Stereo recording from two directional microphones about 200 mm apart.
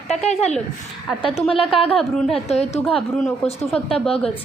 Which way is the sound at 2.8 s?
Centre (ahead or behind).